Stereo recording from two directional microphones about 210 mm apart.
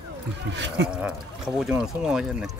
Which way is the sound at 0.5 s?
55° right (ahead or behind).